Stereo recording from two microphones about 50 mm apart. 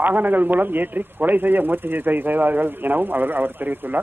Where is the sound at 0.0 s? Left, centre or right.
Right.